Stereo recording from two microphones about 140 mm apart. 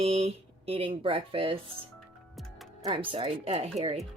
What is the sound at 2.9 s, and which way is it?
Speech, 40° right (ahead or behind).